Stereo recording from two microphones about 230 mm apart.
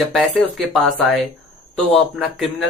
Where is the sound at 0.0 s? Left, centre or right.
Centre.